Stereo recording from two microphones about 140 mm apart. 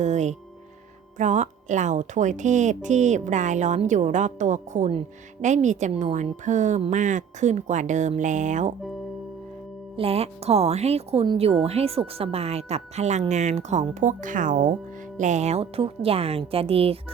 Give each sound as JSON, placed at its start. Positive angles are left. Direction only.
{"t": 0.0, "sound": "music", "side_deg": -55}
{"t": 1.2, "sound": "a woman's voice", "side_deg": -60}
{"t": 9.9, "sound": "a woman's voice", "side_deg": -45}
{"t": 15.2, "sound": "speech", "side_deg": -60}